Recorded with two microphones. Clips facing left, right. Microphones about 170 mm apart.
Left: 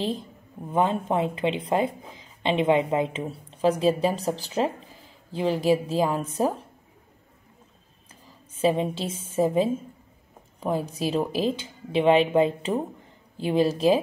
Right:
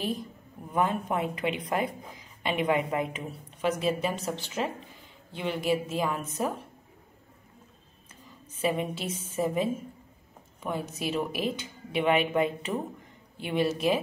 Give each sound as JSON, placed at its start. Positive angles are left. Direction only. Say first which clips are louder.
{"t": 0.7, "sound": "a woman's voice", "louder": "left 4 dB", "side_deg": 25}
{"t": 8.5, "sound": "a woman's voice", "louder": "left 6 dB", "side_deg": 30}